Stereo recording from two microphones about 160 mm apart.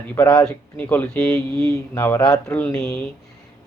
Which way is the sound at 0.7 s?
10° left (ahead or behind).